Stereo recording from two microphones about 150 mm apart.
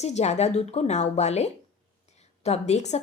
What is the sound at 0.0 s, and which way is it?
A woman's voice, 45° left (ahead or behind).